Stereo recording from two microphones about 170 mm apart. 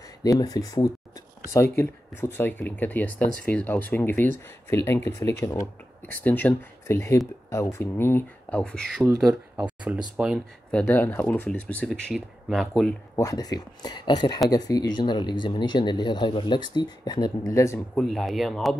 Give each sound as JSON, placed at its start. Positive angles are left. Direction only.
{"t": 0.2, "sound": "speech", "side_deg": 20}
{"t": 9.3, "sound": "speech", "side_deg": -5}
{"t": 13.1, "sound": "speech", "side_deg": 20}
{"t": 17.9, "sound": "speech", "side_deg": 0}